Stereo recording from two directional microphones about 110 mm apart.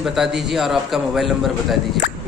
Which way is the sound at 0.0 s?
5° right (ahead or behind).